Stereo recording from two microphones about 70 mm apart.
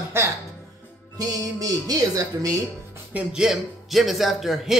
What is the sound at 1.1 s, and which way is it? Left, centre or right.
Music, right.